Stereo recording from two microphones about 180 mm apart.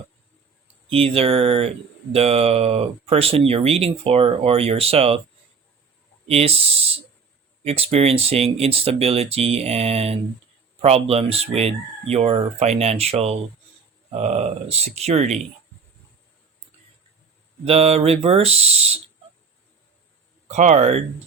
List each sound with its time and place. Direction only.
0.9 s speech: 30° right (ahead or behind)
6.2 s speech: 35° right (ahead or behind)
17.7 s speech: 35° right (ahead or behind)
20.5 s speech: 40° right (ahead or behind)